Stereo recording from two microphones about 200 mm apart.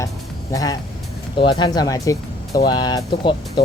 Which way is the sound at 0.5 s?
20° left (ahead or behind).